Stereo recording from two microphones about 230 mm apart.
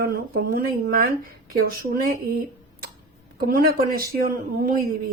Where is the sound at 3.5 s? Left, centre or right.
Right.